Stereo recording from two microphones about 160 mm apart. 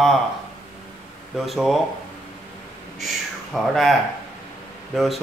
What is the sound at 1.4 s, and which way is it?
Speech, centre (ahead or behind).